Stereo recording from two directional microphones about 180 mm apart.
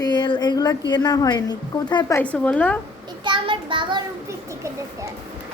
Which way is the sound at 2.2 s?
10° left (ahead or behind).